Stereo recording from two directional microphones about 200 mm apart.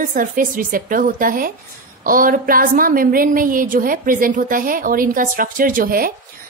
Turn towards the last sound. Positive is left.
turn(degrees=-45)  # may be behind; listen again after turning